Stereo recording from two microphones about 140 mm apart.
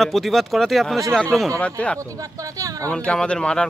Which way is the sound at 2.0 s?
25° right (ahead or behind).